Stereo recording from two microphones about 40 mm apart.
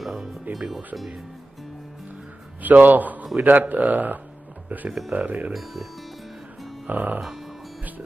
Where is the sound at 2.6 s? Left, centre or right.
Right.